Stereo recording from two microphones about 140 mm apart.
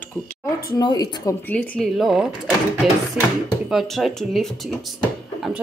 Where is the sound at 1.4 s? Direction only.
10° left (ahead or behind).